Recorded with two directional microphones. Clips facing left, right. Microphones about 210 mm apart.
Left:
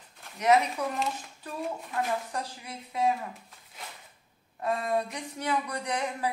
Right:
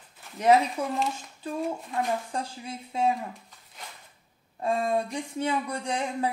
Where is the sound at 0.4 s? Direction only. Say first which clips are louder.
Right 3 dB; 30° right (ahead or behind).